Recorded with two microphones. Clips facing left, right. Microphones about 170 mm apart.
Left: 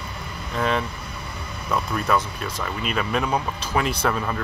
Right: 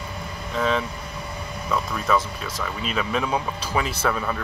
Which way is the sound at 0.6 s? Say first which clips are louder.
Even; centre (ahead or behind).